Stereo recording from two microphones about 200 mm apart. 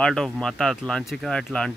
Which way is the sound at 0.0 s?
5° left (ahead or behind).